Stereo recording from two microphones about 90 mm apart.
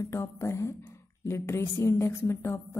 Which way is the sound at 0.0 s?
30° left (ahead or behind).